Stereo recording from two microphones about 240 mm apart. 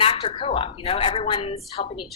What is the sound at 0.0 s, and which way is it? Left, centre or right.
A woman's voice, left.